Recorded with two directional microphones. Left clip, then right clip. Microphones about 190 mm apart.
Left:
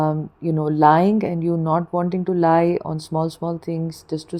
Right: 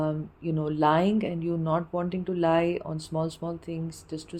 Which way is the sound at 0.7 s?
15° left (ahead or behind).